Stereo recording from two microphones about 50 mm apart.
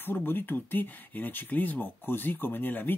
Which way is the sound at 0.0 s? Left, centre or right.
Left.